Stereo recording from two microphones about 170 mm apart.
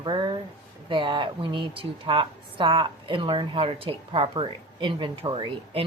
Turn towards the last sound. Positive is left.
turn(degrees=-30)  # may be behind; listen again after turning